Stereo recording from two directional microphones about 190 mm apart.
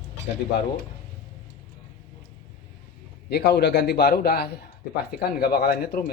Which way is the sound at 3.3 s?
60° left (ahead or behind).